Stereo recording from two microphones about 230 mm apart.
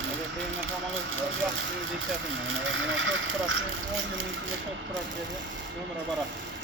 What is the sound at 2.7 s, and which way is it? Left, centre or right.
Speech, right.